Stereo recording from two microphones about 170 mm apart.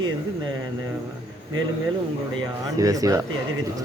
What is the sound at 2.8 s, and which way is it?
Speech, 20° right (ahead or behind).